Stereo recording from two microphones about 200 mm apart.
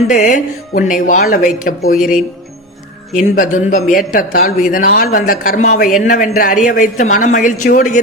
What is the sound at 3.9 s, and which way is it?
Speech, 45° left (ahead or behind).